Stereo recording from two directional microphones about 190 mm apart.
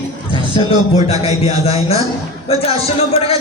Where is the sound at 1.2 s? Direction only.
30° left (ahead or behind).